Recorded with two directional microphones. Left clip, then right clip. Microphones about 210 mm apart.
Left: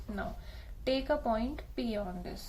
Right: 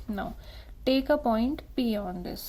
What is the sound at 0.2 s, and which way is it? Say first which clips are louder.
A woman's voice: right 4 dB; 35° right (ahead or behind).